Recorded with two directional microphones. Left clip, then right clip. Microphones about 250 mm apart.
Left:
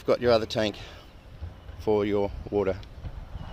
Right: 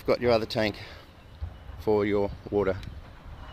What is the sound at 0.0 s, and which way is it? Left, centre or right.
Speech, centre.